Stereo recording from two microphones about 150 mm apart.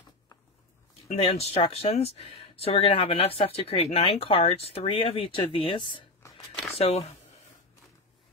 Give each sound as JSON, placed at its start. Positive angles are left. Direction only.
{"t": 1.0, "sound": "speech", "side_deg": 45}
{"t": 6.8, "sound": "speech", "side_deg": 45}